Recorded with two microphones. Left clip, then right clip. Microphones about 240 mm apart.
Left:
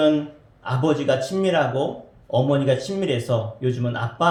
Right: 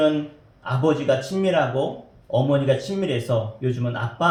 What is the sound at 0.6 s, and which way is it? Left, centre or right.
A man's voice, left.